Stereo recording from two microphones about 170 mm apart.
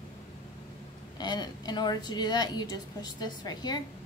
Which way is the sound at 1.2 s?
25° left (ahead or behind).